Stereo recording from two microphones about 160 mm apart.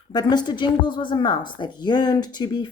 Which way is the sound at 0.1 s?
25° left (ahead or behind).